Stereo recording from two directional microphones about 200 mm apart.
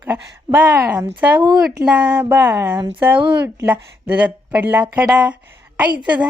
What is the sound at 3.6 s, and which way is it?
Speech, 10° right (ahead or behind).